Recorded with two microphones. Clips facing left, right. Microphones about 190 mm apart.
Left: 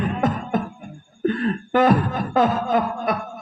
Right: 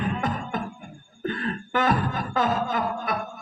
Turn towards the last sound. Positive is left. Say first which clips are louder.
# left 6 dB
turn(degrees=35)  # may be behind; listen again after turning